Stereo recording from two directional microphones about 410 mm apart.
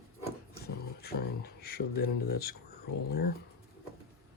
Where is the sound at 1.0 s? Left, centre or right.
Left.